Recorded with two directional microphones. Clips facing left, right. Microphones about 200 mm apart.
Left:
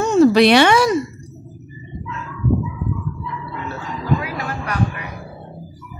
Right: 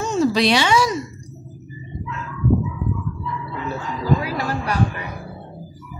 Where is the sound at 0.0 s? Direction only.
60° left (ahead or behind).